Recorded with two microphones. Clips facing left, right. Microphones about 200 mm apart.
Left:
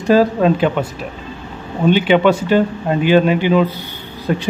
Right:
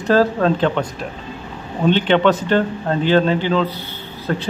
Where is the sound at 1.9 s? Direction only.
10° left (ahead or behind).